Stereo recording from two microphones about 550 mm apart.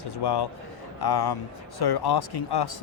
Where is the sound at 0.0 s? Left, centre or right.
Left.